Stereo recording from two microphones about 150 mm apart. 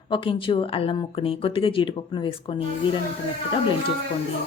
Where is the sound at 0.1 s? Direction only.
35° left (ahead or behind).